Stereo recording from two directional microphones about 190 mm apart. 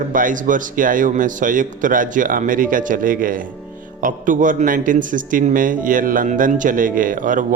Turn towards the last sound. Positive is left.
turn(degrees=-45)  # may be behind; listen again after turning